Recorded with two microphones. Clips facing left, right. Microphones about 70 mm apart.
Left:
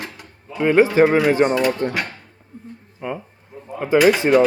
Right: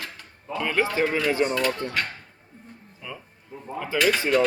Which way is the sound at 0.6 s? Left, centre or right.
Left.